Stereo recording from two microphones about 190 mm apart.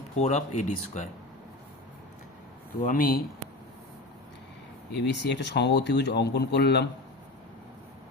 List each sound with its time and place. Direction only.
0.2 s speech: 40° left (ahead or behind)
2.8 s speech: 45° left (ahead or behind)
5.0 s speech: 65° left (ahead or behind)